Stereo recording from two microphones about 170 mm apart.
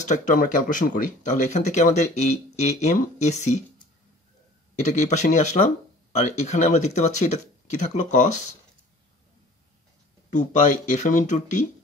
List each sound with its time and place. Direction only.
0.0 s speech: 45° left (ahead or behind)
4.7 s speech: 45° left (ahead or behind)
10.3 s speech: 45° left (ahead or behind)